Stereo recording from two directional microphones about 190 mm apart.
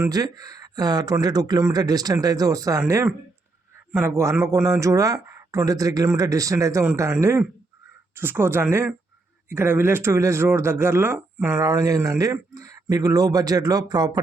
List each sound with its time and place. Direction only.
0.0 s speech: 20° right (ahead or behind)